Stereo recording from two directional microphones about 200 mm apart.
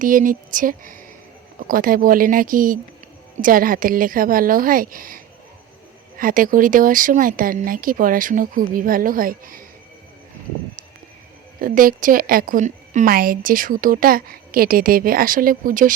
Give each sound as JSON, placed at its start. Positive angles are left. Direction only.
{"t": 0.0, "sound": "a woman's voice", "side_deg": -40}
{"t": 11.6, "sound": "a woman's voice", "side_deg": -45}